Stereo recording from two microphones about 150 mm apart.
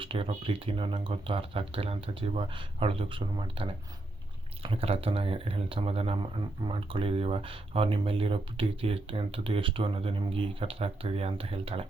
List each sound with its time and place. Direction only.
0.0 s speech: 35° right (ahead or behind)